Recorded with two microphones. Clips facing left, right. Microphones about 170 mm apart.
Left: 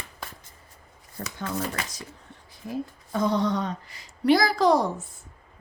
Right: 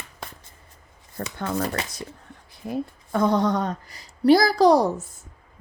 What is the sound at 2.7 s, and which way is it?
A woman's voice, 60° right (ahead or behind).